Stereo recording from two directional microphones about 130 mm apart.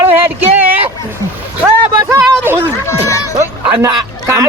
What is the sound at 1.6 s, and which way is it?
Speech, 20° right (ahead or behind).